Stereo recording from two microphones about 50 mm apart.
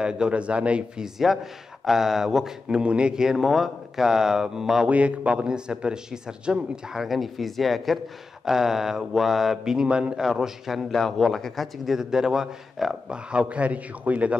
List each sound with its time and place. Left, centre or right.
0.0 s a man's voice: right
1.3 s a man's voice: centre
2.8 s speech: right
4.8 s a man's voice: right
7.0 s a man's voice: centre
10.2 s a man's voice: centre
13.1 s a man's voice: right